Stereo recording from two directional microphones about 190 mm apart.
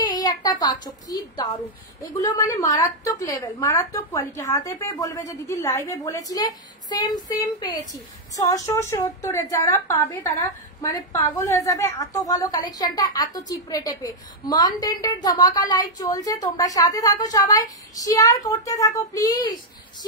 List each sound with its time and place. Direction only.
0.0 s a woman's voice: 20° left (ahead or behind)